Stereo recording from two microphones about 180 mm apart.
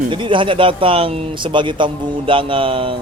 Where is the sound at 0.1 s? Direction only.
25° right (ahead or behind).